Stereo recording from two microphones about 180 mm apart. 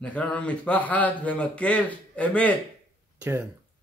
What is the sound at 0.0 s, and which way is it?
Speech, 5° left (ahead or behind).